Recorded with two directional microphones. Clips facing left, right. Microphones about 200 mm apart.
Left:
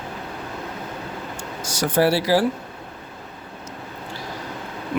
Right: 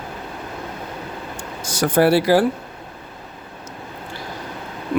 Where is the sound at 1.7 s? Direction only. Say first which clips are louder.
Right 3 dB; 55° right (ahead or behind).